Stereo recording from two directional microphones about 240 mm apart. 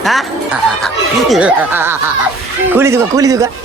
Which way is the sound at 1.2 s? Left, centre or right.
Centre.